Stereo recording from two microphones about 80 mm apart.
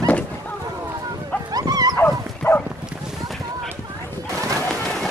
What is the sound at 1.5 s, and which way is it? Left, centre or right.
Dog, right.